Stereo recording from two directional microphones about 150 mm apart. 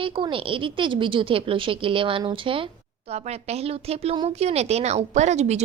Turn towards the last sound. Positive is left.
turn(degrees=-50)  # may be behind; listen again after turning